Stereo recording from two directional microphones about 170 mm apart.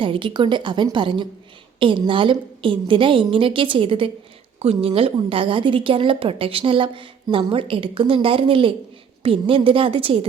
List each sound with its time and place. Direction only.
0.0 s a woman's voice: 30° right (ahead or behind)